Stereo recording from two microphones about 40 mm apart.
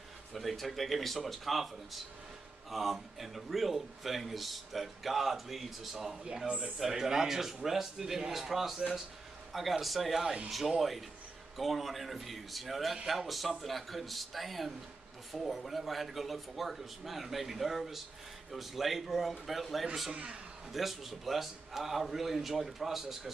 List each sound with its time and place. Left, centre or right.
0.3 s a man's voice: centre
2.7 s a man's voice: centre
6.4 s speech: right
6.8 s a man's voice: centre